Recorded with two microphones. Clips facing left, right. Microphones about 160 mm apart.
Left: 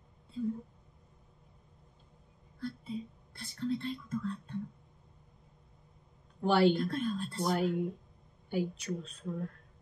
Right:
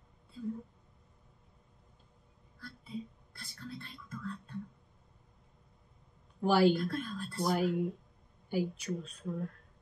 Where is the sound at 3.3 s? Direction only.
20° left (ahead or behind).